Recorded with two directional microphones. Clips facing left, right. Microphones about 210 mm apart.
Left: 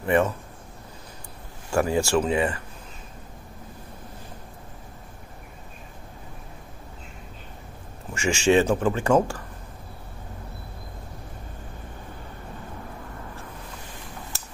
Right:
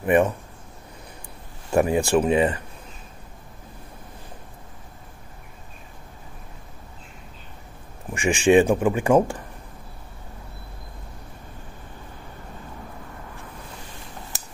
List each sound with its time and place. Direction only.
0.0 s speech: 15° right (ahead or behind)
1.7 s speech: 20° right (ahead or behind)
8.1 s speech: 15° right (ahead or behind)